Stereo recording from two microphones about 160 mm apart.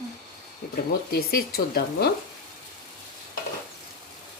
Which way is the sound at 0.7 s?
70° left (ahead or behind).